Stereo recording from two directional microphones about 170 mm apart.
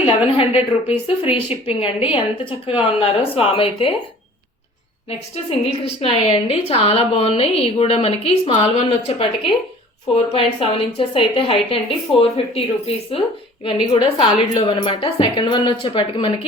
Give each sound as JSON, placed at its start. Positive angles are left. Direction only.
{"t": 0.0, "sound": "a woman's voice", "side_deg": 35}
{"t": 5.5, "sound": "a woman's voice", "side_deg": 35}